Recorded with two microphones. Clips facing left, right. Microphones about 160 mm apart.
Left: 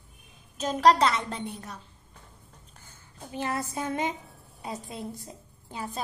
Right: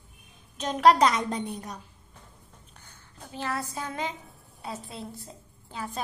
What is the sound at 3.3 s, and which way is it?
A woman's voice, 20° left (ahead or behind).